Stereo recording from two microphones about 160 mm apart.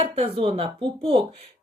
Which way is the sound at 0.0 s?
40° right (ahead or behind).